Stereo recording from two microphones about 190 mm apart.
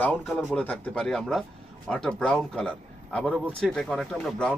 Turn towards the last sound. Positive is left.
turn(degrees=5)  # may be behind; listen again after turning